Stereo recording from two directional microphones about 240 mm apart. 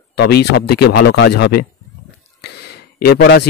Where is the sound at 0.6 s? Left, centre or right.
Left.